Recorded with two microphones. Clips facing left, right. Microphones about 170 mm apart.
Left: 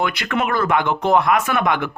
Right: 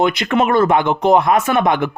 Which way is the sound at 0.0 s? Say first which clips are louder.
Right 6 dB; 25° right (ahead or behind).